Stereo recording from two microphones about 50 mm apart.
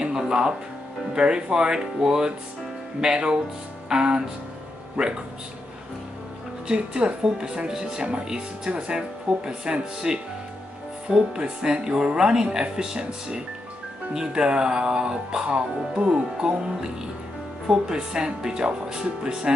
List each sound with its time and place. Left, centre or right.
0.3 s speech: centre
6.7 s speech: centre